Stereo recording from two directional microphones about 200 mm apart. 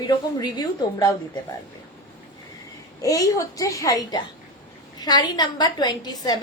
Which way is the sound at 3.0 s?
15° left (ahead or behind).